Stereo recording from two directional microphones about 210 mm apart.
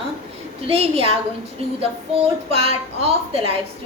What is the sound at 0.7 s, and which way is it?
A woman's voice, 30° right (ahead or behind).